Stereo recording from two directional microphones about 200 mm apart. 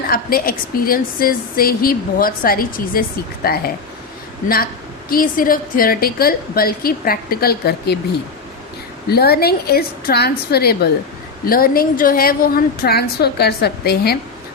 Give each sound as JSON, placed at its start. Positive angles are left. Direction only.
{"t": 0.1, "sound": "a woman's voice", "side_deg": 45}
{"t": 9.0, "sound": "a woman's voice", "side_deg": 50}